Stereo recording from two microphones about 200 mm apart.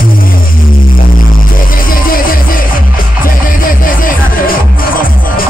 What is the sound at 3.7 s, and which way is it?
Music, 45° left (ahead or behind).